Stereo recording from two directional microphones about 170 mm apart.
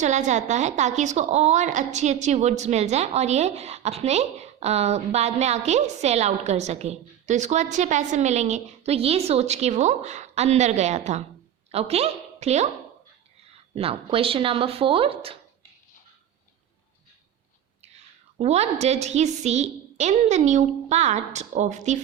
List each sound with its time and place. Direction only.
0.0 s a woman's voice: 45° right (ahead or behind)
17.8 s a woman's voice: 40° right (ahead or behind)